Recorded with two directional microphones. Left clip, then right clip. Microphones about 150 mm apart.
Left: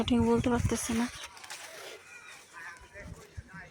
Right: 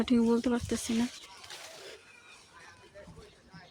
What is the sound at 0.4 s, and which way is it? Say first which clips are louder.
Speech: left 2 dB; 20° right (ahead or behind).